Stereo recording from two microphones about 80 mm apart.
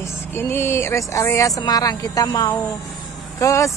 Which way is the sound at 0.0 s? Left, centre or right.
Left.